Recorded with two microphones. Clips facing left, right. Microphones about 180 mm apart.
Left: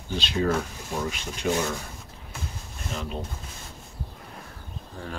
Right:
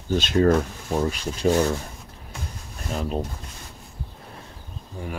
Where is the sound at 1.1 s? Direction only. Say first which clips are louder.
Right 6 dB; 40° right (ahead or behind).